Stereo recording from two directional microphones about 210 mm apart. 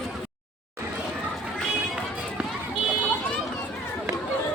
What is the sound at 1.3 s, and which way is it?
Run, centre (ahead or behind).